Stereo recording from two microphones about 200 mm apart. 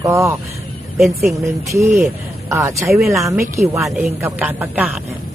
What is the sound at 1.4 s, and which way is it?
Speech, 15° right (ahead or behind).